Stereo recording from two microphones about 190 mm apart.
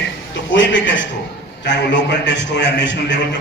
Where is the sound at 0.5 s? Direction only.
75° left (ahead or behind).